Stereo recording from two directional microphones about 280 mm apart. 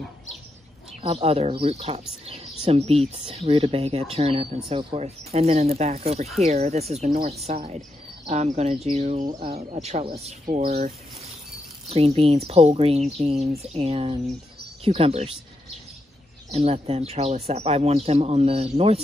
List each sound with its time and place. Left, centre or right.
1.0 s speech: right
11.9 s speech: right
16.5 s speech: right